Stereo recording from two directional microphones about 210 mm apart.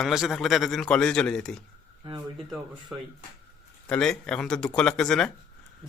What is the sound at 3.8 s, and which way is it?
Speech, 5° left (ahead or behind).